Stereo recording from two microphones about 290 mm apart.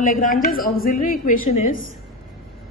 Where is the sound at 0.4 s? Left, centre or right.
Left.